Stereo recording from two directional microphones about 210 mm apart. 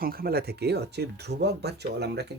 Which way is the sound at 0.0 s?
45° right (ahead or behind).